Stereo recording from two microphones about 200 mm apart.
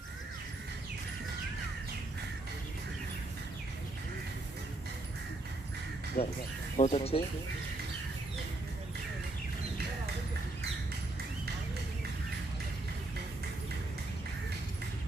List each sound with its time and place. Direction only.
6.2 s speech: 45° left (ahead or behind)
6.7 s speech: 30° left (ahead or behind)